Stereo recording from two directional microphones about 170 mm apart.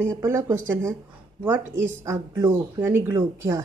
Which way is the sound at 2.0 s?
15° right (ahead or behind).